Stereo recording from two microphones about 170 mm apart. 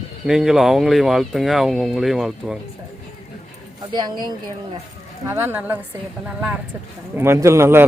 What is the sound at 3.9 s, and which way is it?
Speech, 25° right (ahead or behind).